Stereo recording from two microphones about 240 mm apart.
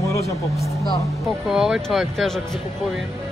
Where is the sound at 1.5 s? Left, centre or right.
Centre.